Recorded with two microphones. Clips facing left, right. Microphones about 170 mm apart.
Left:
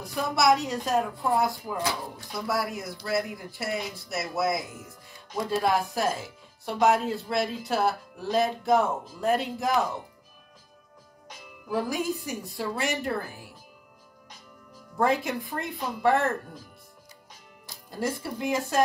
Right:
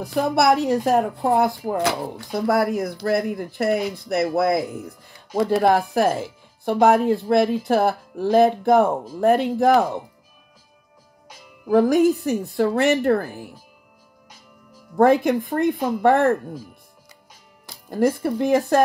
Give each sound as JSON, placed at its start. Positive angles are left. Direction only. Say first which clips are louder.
{"t": 0.0, "sound": "speech", "louder": "right 6 dB", "side_deg": -60}
{"t": 11.6, "sound": "speech", "louder": "right 13 dB", "side_deg": -55}
{"t": 15.0, "sound": "speech", "louder": "right 9 dB", "side_deg": -55}
{"t": 17.8, "sound": "speech", "louder": "right 11 dB", "side_deg": -55}